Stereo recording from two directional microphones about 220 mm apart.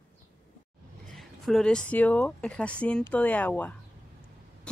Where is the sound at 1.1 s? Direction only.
Centre (ahead or behind).